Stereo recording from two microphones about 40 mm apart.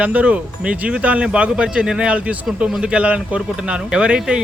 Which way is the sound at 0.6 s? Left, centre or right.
Right.